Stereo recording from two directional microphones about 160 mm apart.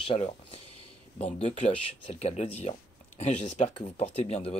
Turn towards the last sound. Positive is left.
turn(degrees=40)  # may be behind; listen again after turning